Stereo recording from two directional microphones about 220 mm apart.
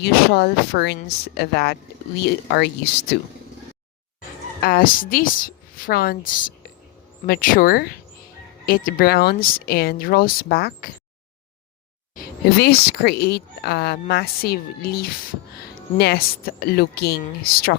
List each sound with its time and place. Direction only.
0.0 s speech: 45° left (ahead or behind)
4.6 s a woman's voice: 40° left (ahead or behind)
12.1 s speech: 45° left (ahead or behind)